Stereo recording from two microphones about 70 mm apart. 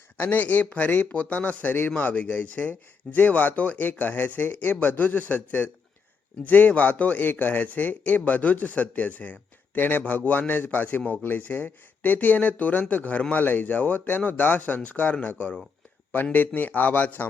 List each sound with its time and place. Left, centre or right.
0.2 s speech: left